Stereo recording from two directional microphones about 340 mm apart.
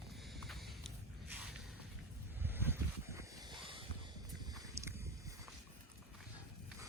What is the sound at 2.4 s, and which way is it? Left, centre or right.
Boat, centre.